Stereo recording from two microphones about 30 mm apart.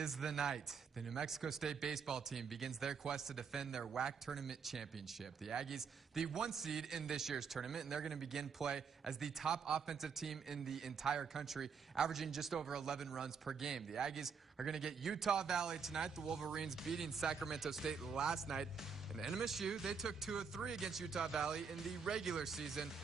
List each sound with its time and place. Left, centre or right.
0.0 s a man's voice: centre
4.4 s a man's voice: centre
6.5 s a man's voice: centre
11.1 s a man's voice: centre
15.3 s a man's voice: right